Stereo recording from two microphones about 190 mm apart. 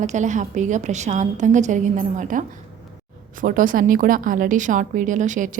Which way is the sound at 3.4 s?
45° right (ahead or behind).